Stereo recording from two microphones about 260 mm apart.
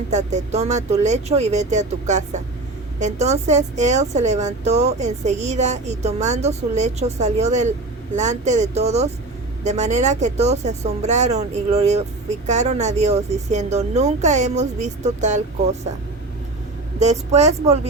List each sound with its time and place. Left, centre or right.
0.1 s speech: right
17.0 s speech: right